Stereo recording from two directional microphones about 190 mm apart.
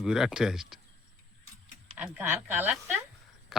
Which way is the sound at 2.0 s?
10° right (ahead or behind).